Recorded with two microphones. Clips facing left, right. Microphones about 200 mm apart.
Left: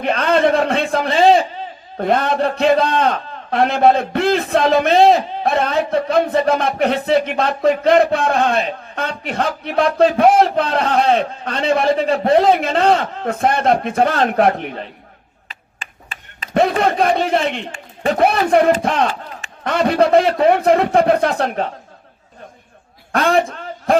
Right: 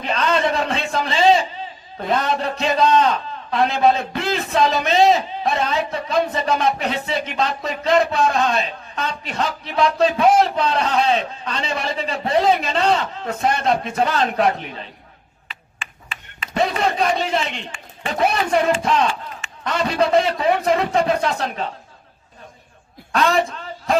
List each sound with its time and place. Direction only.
0.0 s a man's voice: 55° left (ahead or behind)
15.4 s a sound: 40° left (ahead or behind)
16.6 s a man's voice: 55° left (ahead or behind)
23.1 s speech: 50° left (ahead or behind)